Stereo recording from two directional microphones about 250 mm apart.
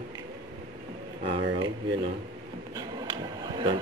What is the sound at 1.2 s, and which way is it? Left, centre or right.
Speech, right.